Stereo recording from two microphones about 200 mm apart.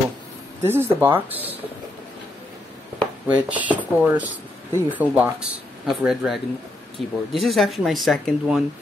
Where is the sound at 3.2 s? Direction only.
5° right (ahead or behind).